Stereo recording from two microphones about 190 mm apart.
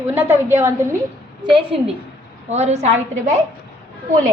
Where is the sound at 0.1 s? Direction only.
10° right (ahead or behind).